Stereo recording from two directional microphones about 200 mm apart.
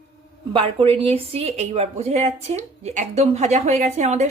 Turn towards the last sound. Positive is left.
turn(degrees=-35)  # may be behind; listen again after turning